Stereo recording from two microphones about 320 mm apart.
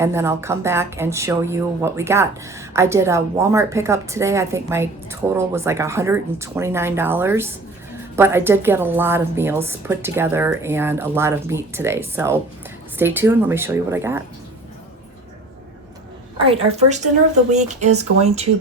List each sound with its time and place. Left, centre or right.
0.0 s speech: centre
16.4 s speech: centre